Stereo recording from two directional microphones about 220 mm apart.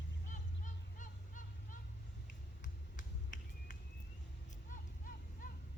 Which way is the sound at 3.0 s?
35° left (ahead or behind).